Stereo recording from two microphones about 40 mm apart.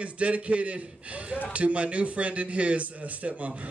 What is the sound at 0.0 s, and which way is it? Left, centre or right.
A man's voice, right.